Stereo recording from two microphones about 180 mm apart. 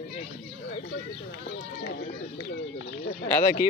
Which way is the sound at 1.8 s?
65° left (ahead or behind).